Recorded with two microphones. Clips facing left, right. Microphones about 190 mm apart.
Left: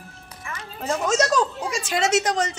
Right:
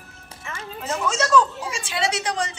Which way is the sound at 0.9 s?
40° left (ahead or behind).